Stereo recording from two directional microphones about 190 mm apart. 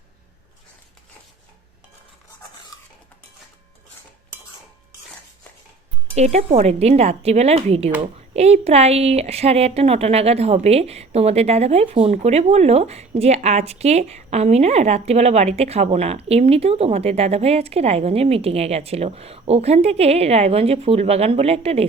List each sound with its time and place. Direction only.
6.1 s a woman's voice: 35° right (ahead or behind)